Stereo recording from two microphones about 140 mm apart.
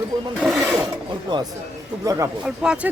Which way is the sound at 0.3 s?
5° right (ahead or behind).